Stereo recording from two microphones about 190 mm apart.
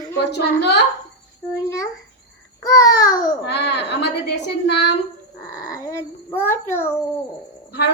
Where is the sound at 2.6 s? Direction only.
20° left (ahead or behind).